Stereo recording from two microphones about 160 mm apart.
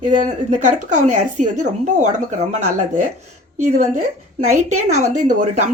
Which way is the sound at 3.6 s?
45° right (ahead or behind).